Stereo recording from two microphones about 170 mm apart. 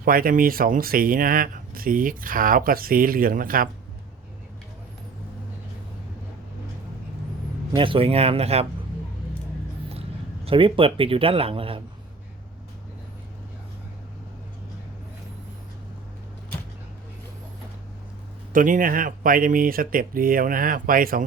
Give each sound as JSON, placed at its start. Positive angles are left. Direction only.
{"t": 0.0, "sound": "speech", "side_deg": -55}
{"t": 7.8, "sound": "speech", "side_deg": -30}
{"t": 9.9, "sound": "speech", "side_deg": -35}
{"t": 18.5, "sound": "speech", "side_deg": -50}